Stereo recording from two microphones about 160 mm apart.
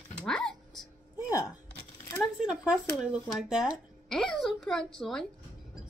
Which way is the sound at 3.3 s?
5° right (ahead or behind).